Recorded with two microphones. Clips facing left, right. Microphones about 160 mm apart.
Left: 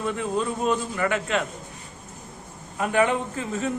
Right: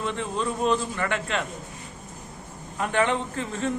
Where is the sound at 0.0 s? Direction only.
10° left (ahead or behind).